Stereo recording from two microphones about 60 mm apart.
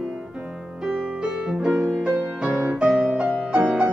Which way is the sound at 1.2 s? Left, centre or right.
Centre.